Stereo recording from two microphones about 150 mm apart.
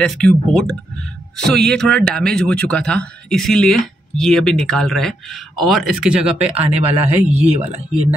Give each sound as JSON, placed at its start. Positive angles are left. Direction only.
{"t": 0.0, "sound": "speech", "side_deg": 5}
{"t": 6.2, "sound": "speech", "side_deg": -40}